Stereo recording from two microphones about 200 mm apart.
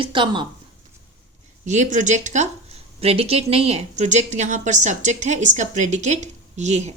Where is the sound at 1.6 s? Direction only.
35° right (ahead or behind).